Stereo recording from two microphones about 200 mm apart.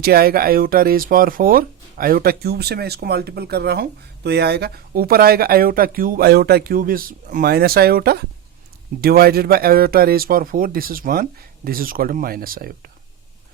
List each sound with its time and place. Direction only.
0.0 s speech: 50° right (ahead or behind)